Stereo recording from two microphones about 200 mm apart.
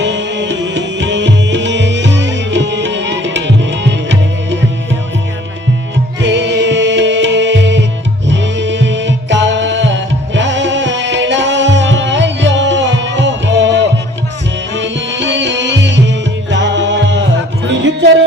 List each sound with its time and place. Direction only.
0.0 s music: 65° right (ahead or behind)
6.2 s music: 65° right (ahead or behind)